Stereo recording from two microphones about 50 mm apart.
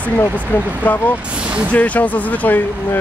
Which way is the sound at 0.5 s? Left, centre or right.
Left.